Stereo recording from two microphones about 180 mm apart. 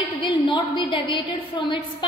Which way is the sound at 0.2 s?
25° left (ahead or behind).